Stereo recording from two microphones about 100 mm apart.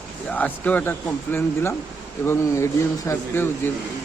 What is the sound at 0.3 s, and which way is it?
A man's voice, 15° left (ahead or behind).